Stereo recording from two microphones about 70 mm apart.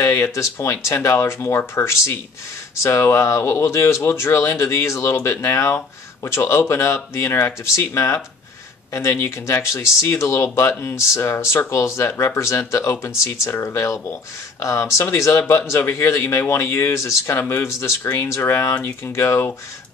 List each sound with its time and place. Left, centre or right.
0.0 s speech: left